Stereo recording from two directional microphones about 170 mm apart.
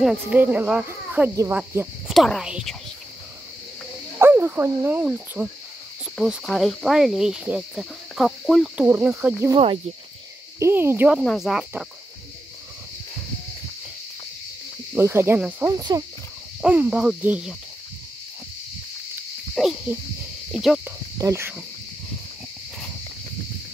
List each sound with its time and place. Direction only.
0.0 s speech: 5° right (ahead or behind)
4.2 s speech: 10° right (ahead or behind)
8.8 s speech: 15° right (ahead or behind)
10.6 s speech: 15° right (ahead or behind)
15.0 s speech: 15° right (ahead or behind)
15.7 s insect: 20° right (ahead or behind)
16.6 s speech: 10° right (ahead or behind)
19.5 s a sound: centre (ahead or behind)
20.5 s speech: centre (ahead or behind)
20.8 s speech: 15° right (ahead or behind)